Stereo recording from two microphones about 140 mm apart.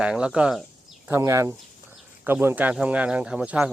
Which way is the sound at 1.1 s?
20° right (ahead or behind).